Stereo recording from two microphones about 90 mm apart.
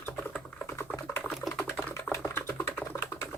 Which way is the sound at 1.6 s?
15° left (ahead or behind).